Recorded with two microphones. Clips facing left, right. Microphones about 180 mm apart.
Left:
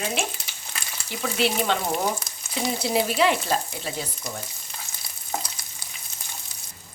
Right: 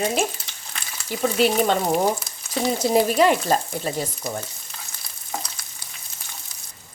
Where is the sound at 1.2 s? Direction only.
45° right (ahead or behind).